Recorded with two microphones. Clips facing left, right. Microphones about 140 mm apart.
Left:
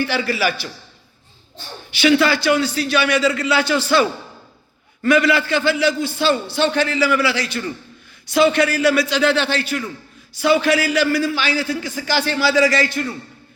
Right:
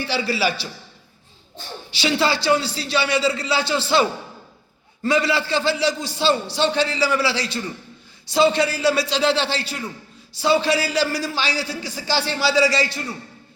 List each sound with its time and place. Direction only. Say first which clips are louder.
0.0 s a man's voice: left 2 dB; 30° right (ahead or behind)
1.9 s a man's voice: left 5 dB; 30° right (ahead or behind)
5.0 s a man's voice: left 4 dB; 30° right (ahead or behind)
12.5 s a man's voice: left 2 dB; 55° left (ahead or behind)
12.8 s a man's voice: left 4 dB; 30° right (ahead or behind)